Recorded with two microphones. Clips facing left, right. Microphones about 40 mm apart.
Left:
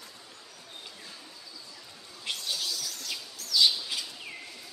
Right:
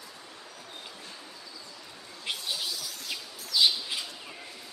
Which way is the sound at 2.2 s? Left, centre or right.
Centre.